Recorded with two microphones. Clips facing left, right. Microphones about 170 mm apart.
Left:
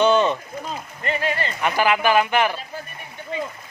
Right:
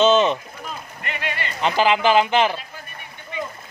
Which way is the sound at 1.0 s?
35° left (ahead or behind).